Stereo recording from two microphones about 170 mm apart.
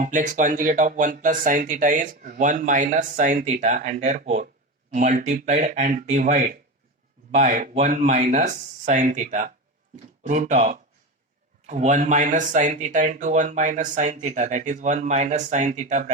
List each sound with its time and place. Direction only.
0.0 s speech: 50° right (ahead or behind)